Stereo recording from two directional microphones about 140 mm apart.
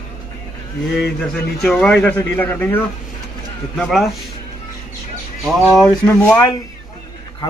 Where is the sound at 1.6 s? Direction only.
Centre (ahead or behind).